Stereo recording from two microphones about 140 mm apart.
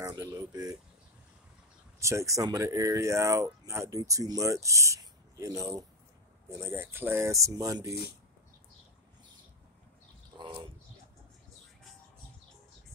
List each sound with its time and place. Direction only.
0.0 s speech: 25° right (ahead or behind)
2.0 s speech: 20° right (ahead or behind)